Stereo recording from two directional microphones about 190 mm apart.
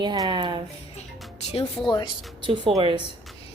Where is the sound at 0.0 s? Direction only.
25° right (ahead or behind).